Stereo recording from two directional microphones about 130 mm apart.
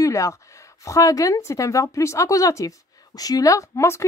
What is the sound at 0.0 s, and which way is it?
A woman's voice, 25° left (ahead or behind).